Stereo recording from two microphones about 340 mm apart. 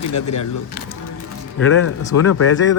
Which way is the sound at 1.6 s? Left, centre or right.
Left.